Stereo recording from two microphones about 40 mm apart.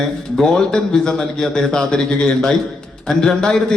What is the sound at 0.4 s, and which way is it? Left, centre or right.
A man's voice, centre.